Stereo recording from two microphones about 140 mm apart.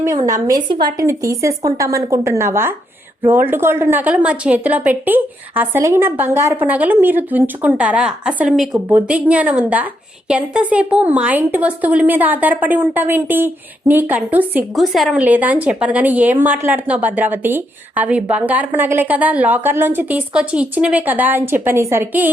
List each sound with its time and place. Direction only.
0.4 s a woman's voice: 30° right (ahead or behind); by 14.6 s 10° right (ahead or behind)
14.8 s speech: centre (ahead or behind)
15.2 s speech: 10° right (ahead or behind)